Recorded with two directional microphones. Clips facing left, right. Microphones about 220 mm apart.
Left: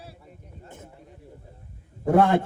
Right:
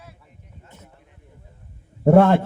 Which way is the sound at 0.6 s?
50° left (ahead or behind).